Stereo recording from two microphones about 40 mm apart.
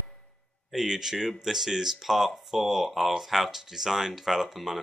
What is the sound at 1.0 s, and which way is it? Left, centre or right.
Speech, centre.